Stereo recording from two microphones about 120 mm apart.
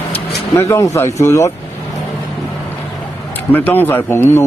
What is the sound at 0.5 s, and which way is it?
Speech, 25° left (ahead or behind).